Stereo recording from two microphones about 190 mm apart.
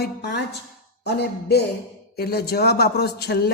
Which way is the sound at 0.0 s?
60° left (ahead or behind).